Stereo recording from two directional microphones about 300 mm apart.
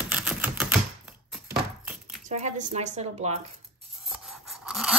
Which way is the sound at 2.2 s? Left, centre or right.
Right.